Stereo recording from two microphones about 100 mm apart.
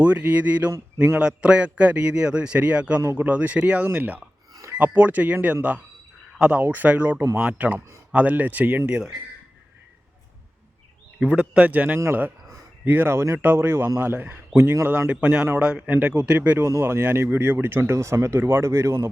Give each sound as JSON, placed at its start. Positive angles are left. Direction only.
{"t": 0.0, "sound": "a man's voice", "side_deg": -15}
{"t": 3.0, "sound": "speech", "side_deg": -30}
{"t": 3.2, "sound": "a man's voice", "side_deg": -15}
{"t": 11.2, "sound": "a man's voice", "side_deg": -10}
{"t": 16.6, "sound": "speech", "side_deg": -25}